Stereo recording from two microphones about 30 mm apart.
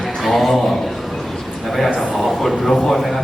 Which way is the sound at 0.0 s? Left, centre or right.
Centre.